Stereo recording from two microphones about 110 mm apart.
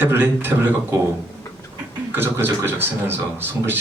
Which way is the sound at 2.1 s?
20° right (ahead or behind).